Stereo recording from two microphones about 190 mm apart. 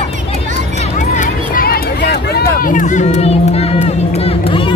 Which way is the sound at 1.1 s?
45° left (ahead or behind).